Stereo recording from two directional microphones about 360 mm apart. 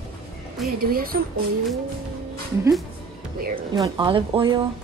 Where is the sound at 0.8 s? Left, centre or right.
Right.